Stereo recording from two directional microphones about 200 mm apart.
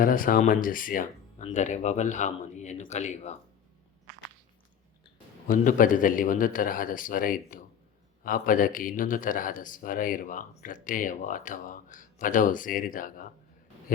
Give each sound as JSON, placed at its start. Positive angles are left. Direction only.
{"t": 0.0, "sound": "a man's voice", "side_deg": 45}
{"t": 5.5, "sound": "a man's voice", "side_deg": 45}